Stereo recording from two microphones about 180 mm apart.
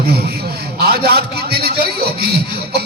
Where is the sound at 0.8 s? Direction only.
60° right (ahead or behind).